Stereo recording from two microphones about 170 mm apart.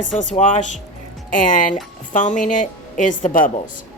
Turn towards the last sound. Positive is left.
turn(degrees=50)  # may be behind; listen again after turning